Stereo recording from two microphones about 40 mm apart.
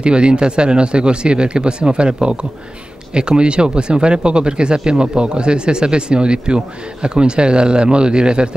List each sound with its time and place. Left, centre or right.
0.0 s speech: right